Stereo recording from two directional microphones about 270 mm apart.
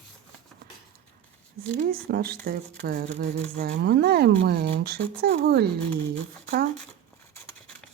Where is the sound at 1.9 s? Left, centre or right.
Right.